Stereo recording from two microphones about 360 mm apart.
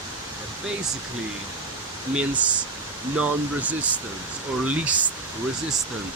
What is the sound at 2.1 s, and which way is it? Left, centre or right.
Speech, centre.